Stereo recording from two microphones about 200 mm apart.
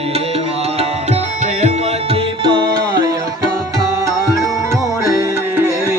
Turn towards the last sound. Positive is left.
turn(degrees=-15)  # may be behind; listen again after turning